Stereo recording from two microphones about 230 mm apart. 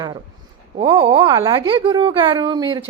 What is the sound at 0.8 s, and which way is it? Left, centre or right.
A woman's voice, right.